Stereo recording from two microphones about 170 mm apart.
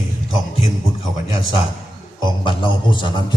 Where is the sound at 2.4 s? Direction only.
30° left (ahead or behind).